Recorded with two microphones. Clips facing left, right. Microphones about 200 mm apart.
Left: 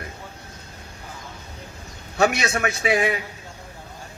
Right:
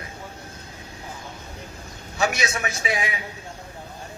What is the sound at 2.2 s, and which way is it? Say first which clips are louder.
A man's voice: left 4 dB; 60° left (ahead or behind).